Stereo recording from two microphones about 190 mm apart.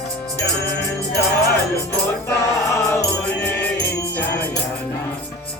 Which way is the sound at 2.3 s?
15° left (ahead or behind).